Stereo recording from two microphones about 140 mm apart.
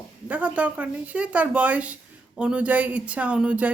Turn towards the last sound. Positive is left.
turn(degrees=-10)  # may be behind; listen again after turning